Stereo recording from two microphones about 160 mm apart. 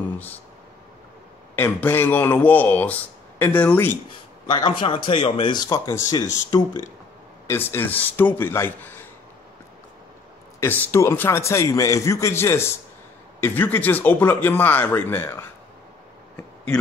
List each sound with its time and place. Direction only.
1.5 s a man's voice: 15° left (ahead or behind)
4.5 s a man's voice: 30° left (ahead or behind); by 9.0 s 15° left (ahead or behind)
10.6 s a man's voice: 15° left (ahead or behind)